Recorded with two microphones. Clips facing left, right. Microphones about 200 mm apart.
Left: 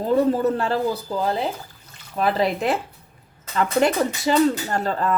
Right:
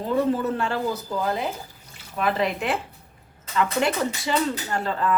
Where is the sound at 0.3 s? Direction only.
40° left (ahead or behind).